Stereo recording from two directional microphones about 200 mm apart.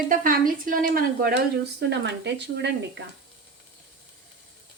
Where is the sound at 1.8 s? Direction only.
60° right (ahead or behind).